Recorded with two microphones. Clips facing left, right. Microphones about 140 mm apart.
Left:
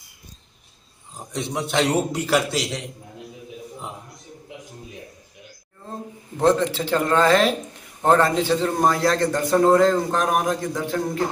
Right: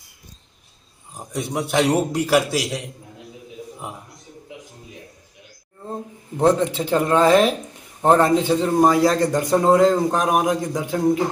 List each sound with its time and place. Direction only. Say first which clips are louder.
1.1 s a man's voice: right 2 dB; 10° right (ahead or behind)
6.3 s a man's voice: right 1 dB; 15° right (ahead or behind)